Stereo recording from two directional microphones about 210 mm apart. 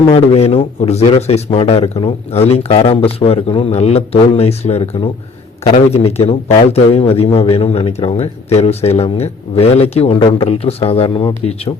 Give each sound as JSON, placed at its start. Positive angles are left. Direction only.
{"t": 0.1, "sound": "speech", "side_deg": 30}